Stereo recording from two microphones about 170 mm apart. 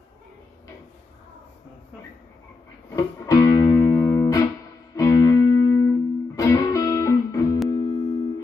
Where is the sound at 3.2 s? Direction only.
20° left (ahead or behind).